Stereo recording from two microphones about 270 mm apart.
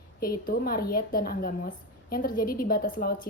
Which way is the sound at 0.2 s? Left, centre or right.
Left.